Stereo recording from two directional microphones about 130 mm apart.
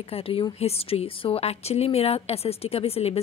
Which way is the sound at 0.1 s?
45° left (ahead or behind).